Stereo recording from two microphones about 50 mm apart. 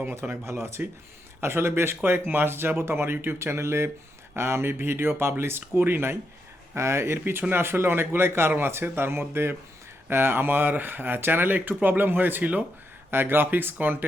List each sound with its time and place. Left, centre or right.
0.0 s speech: right
6.7 s a man's voice: right